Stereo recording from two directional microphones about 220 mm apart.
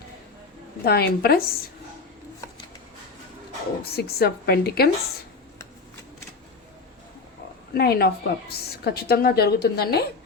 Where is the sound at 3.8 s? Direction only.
45° left (ahead or behind).